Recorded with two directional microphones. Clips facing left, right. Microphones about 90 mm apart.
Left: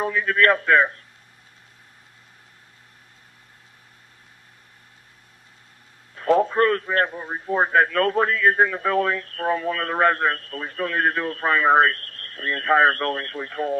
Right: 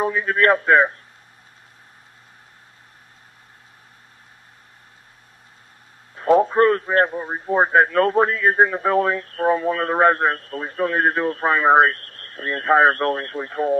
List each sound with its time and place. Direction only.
0.0 s a man's voice: 25° right (ahead or behind)
6.1 s a man's voice: 20° right (ahead or behind)